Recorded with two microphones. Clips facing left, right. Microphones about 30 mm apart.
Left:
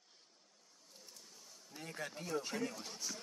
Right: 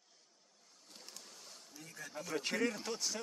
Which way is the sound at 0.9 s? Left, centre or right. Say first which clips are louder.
Right 4 dB; right.